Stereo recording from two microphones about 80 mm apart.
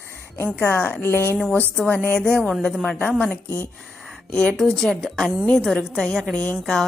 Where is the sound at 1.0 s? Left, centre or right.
Left; by 2.8 s centre.